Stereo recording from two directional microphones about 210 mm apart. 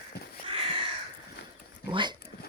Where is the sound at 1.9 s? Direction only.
20° right (ahead or behind).